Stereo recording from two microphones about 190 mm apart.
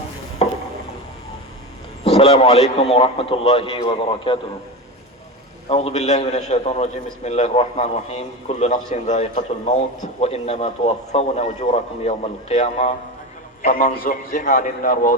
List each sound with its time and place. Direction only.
0.4 s a sound: 30° left (ahead or behind)
2.0 s a man's voice: 30° left (ahead or behind)
5.6 s a man's voice: 35° left (ahead or behind)
13.6 s a man's voice: 45° left (ahead or behind)